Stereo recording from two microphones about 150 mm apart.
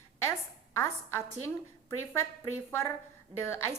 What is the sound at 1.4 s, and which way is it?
Speech, 20° left (ahead or behind).